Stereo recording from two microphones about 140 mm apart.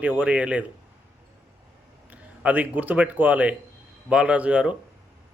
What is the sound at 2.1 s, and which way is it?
A man's voice, 10° right (ahead or behind).